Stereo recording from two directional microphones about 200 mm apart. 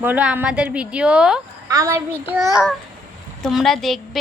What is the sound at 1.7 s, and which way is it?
A child's voice, 15° right (ahead or behind).